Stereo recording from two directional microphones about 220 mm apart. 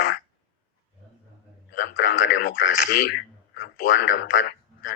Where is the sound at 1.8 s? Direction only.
55° left (ahead or behind).